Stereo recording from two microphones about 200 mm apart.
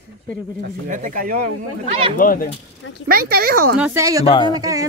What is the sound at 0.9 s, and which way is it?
Speech, 40° right (ahead or behind).